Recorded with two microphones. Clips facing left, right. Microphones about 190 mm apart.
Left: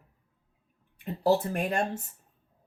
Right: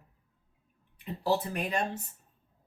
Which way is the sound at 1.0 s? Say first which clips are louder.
Left 5 dB; 50° left (ahead or behind).